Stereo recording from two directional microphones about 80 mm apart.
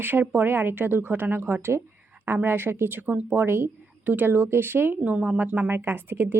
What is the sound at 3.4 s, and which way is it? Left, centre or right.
A woman's voice, right.